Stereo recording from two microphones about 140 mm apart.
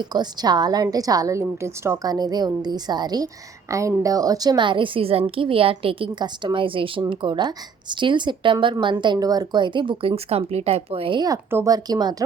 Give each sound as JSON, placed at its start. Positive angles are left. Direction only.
{"t": 0.0, "sound": "a woman's voice", "side_deg": -30}
{"t": 11.3, "sound": "a woman's voice", "side_deg": -25}